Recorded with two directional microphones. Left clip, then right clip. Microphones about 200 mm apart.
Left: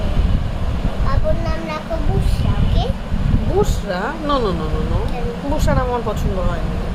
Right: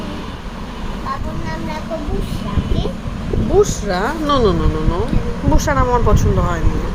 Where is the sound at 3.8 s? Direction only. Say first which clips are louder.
Right 3 dB; 20° right (ahead or behind).